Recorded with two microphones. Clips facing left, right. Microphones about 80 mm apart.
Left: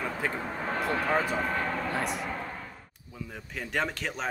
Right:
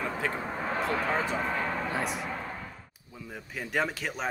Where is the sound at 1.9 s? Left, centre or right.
Centre.